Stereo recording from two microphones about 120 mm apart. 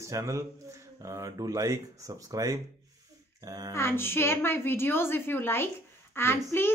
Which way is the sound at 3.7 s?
20° left (ahead or behind).